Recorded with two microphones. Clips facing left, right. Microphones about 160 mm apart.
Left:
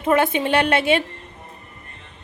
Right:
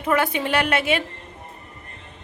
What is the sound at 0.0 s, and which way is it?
A woman's voice, 25° left (ahead or behind).